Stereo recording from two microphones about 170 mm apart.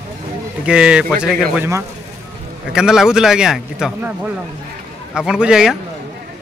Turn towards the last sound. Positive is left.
turn(degrees=-5)  # may be behind; listen again after turning